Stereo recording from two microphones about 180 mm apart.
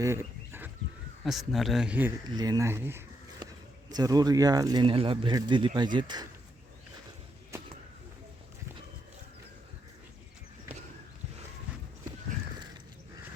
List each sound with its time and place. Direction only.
0.0 s livestock: 15° right (ahead or behind)
1.2 s speech: centre (ahead or behind)
2.2 s speech: 20° right (ahead or behind)